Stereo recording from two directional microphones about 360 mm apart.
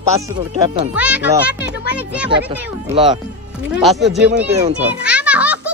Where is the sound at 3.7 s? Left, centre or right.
Centre.